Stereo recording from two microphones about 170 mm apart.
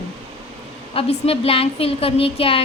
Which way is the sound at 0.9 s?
35° left (ahead or behind).